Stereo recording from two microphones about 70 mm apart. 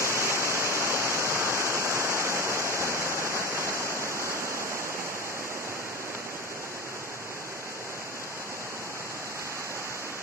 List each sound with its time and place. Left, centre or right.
0.0 s waterfall: right